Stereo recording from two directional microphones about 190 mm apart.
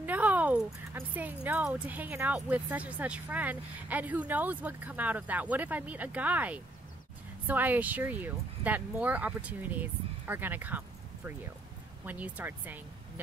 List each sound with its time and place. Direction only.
0.0 s speech: 10° right (ahead or behind)
12.1 s speech: 10° right (ahead or behind)